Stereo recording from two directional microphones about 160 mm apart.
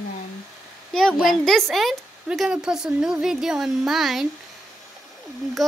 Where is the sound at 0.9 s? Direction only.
Centre (ahead or behind).